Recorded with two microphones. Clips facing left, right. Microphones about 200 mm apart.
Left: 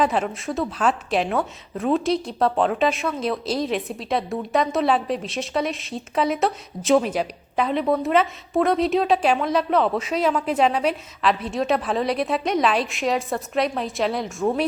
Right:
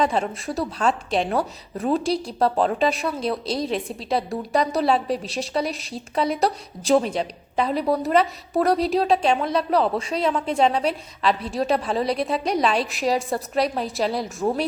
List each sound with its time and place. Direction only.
0.0 s a woman's voice: centre (ahead or behind)